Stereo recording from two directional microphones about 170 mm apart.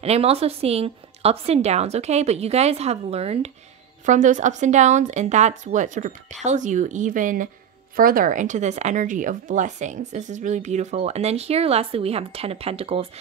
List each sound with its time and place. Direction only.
0.0 s a woman's voice: 35° right (ahead or behind)